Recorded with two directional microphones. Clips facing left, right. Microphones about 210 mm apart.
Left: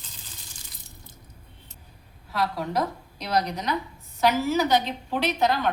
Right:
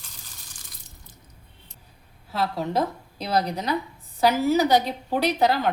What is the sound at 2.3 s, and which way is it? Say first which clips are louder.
A woman's voice: right 2 dB; 25° right (ahead or behind).